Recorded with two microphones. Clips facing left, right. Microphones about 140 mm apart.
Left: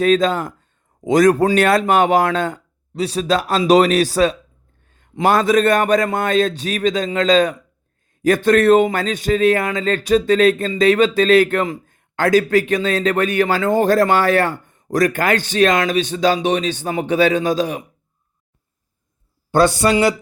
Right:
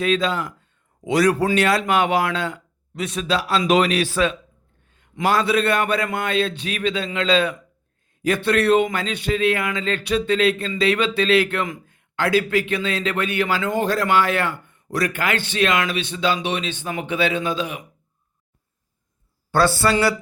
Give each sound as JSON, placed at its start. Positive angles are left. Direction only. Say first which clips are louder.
{"t": 0.0, "sound": "a man's voice", "louder": "left 6 dB", "side_deg": 45}
{"t": 2.9, "sound": "a man's voice", "louder": "left 5 dB", "side_deg": 35}
{"t": 19.5, "sound": "speech", "louder": "left 4 dB", "side_deg": 20}